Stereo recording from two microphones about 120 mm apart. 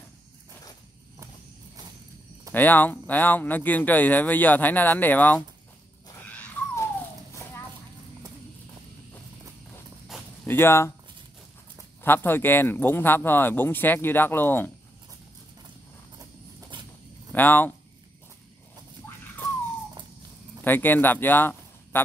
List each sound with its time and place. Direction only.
2.5 s speech: 15° left (ahead or behind)
6.2 s wild animals: 10° left (ahead or behind)
10.4 s speech: 20° left (ahead or behind)
12.0 s speech: 15° left (ahead or behind)
16.7 s a sound: 40° right (ahead or behind)
17.3 s speech: 15° left (ahead or behind)
19.0 s a sound: 20° left (ahead or behind)
20.6 s speech: 15° left (ahead or behind)